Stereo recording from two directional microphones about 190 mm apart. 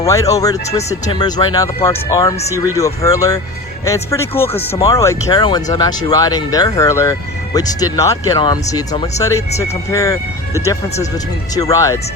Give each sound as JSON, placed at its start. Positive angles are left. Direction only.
{"t": 0.0, "sound": "speech", "side_deg": 15}